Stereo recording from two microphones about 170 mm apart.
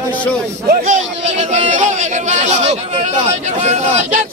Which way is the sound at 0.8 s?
40° right (ahead or behind).